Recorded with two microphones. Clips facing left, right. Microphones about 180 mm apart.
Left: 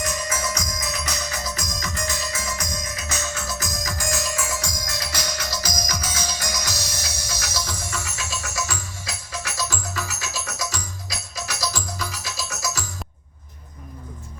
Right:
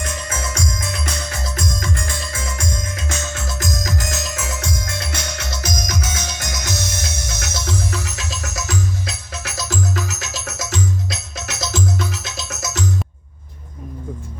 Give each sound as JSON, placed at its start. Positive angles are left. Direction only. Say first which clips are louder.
{"t": 0.0, "sound": "music", "louder": "even", "side_deg": -25}
{"t": 9.3, "sound": "music", "louder": "left 2 dB", "side_deg": 0}
{"t": 9.6, "sound": "music", "louder": "right 7 dB", "side_deg": -20}